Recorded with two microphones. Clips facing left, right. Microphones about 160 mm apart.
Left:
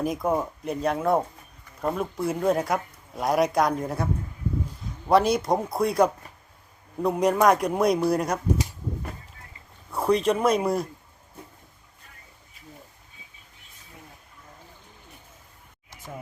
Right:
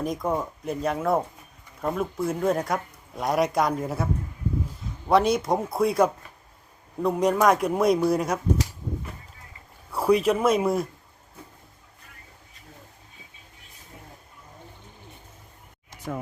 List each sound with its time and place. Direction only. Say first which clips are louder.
0.0 s speech: left 2 dB; 5° left (ahead or behind)
9.9 s speech: right 1 dB; 5° right (ahead or behind)